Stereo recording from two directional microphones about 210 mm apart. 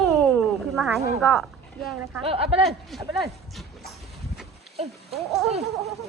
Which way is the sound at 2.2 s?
25° right (ahead or behind).